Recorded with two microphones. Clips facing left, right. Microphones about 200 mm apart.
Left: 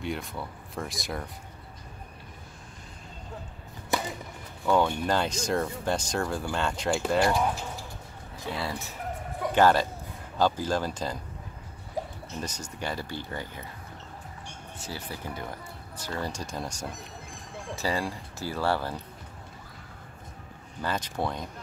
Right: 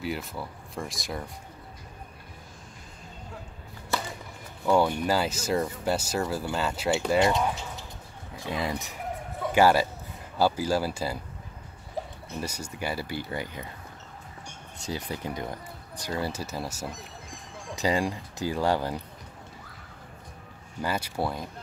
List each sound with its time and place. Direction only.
0.0 s speech: centre (ahead or behind)
3.9 s a sound: 15° left (ahead or behind)
4.6 s speech: 10° right (ahead or behind)
8.5 s speech: 15° right (ahead or behind)
12.4 s speech: 10° right (ahead or behind)
14.9 s speech: 20° right (ahead or behind)
16.1 s speech: 10° right (ahead or behind)
17.7 s speech: 15° right (ahead or behind)
20.8 s speech: 10° right (ahead or behind)